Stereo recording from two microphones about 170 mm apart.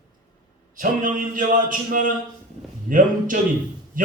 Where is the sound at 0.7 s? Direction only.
50° right (ahead or behind).